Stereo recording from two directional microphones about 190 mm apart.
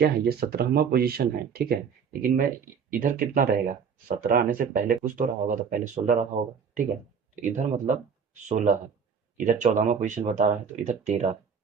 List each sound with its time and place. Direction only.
0.0 s speech: 55° right (ahead or behind)
7.4 s speech: 40° right (ahead or behind)